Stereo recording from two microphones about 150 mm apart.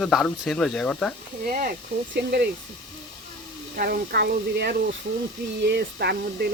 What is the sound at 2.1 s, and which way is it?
Speech, 90° right.